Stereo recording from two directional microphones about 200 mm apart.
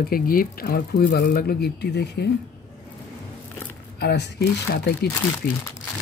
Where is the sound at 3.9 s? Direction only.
55° left (ahead or behind).